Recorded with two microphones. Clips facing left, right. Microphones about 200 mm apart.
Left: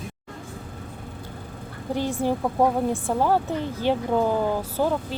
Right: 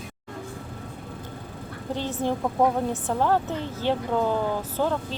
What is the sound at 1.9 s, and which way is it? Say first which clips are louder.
Speech: left 3 dB; 10° left (ahead or behind).